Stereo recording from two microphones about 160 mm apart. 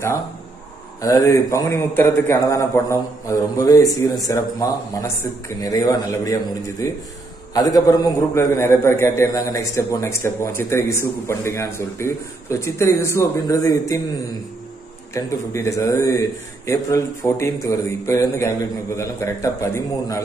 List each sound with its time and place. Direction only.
1.0 s a man's voice: 20° left (ahead or behind)
7.5 s a man's voice: 20° left (ahead or behind)
15.1 s a man's voice: 20° left (ahead or behind)